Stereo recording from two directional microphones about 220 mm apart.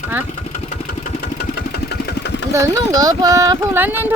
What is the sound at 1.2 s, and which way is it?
Sewing machine, 45° left (ahead or behind).